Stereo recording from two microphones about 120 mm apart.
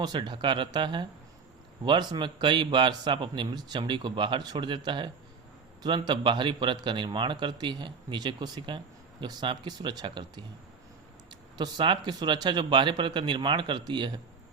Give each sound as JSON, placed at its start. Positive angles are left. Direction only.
{"t": 0.0, "sound": "a man's voice", "side_deg": -40}
{"t": 11.5, "sound": "a man's voice", "side_deg": -40}